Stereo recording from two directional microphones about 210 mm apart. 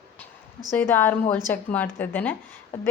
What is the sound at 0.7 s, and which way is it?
A woman's voice, 10° left (ahead or behind).